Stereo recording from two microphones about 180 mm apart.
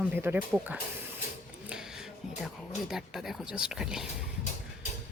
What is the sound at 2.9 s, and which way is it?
A woman's voice, centre (ahead or behind).